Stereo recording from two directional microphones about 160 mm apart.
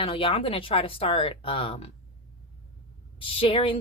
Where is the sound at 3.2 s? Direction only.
35° left (ahead or behind).